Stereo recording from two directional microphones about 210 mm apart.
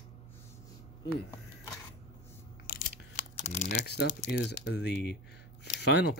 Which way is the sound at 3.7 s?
55° left (ahead or behind).